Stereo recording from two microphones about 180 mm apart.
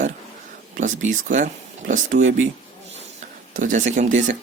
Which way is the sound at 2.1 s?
70° right (ahead or behind).